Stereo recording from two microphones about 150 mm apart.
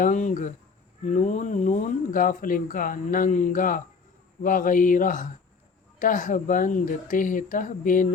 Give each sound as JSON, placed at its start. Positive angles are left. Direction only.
{"t": 0.0, "sound": "speech", "side_deg": 60}